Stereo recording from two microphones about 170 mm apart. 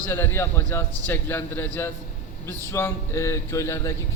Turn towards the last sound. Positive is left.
turn(degrees=15)  # may be behind; listen again after turning